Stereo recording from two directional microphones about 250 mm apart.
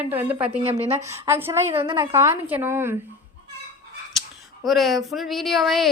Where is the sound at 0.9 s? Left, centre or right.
Centre.